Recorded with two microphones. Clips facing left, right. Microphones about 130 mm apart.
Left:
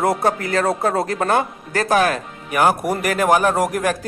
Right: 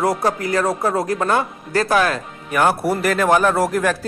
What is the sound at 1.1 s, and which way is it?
Speech, 50° left (ahead or behind).